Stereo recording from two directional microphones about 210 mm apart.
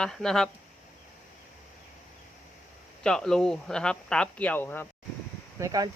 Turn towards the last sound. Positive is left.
turn(degrees=-15)  # may be behind; listen again after turning